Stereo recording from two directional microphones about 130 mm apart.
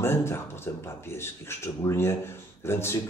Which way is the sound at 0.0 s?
20° left (ahead or behind).